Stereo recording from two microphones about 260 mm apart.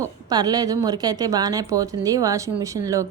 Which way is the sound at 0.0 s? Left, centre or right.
Centre.